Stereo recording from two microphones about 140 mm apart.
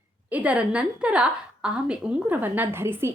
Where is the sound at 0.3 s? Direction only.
10° right (ahead or behind).